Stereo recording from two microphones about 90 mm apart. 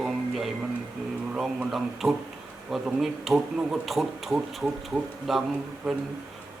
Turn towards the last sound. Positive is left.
turn(degrees=-5)  # may be behind; listen again after turning